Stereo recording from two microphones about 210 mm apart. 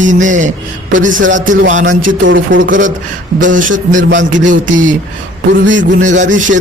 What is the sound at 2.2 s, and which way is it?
Speech, 65° right (ahead or behind).